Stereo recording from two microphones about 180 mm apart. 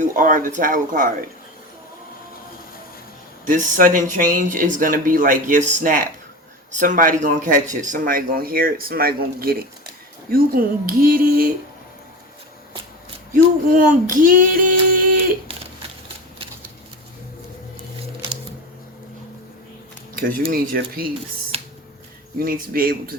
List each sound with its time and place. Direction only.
0.0 s a man's voice: 45° right (ahead or behind)
3.4 s a man's voice: 45° right (ahead or behind)
13.3 s a man's voice: 50° right (ahead or behind)
20.1 s speech: 50° right (ahead or behind)
21.5 s a sound: 35° right (ahead or behind)
22.4 s a man's voice: 55° right (ahead or behind)